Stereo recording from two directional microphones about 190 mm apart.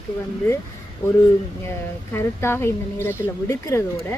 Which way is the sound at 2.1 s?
15° left (ahead or behind).